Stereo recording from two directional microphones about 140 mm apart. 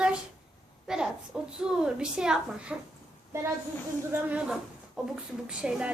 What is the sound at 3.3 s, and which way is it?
Speech, 20° right (ahead or behind).